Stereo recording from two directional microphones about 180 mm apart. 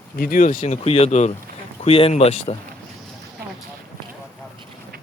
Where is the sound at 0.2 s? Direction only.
50° left (ahead or behind).